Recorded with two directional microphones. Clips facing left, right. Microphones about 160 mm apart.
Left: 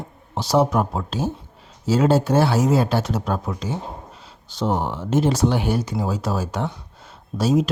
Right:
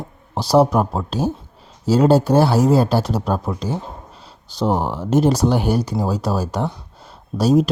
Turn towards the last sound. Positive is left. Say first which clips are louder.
# right 4 dB
turn(degrees=-40)  # may be behind; listen again after turning